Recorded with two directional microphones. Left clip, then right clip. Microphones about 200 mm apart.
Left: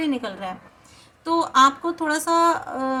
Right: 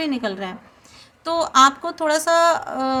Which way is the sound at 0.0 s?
40° right (ahead or behind).